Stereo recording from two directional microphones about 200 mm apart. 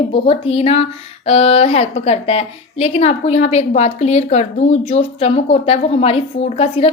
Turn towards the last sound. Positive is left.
turn(degrees=30)  # may be behind; listen again after turning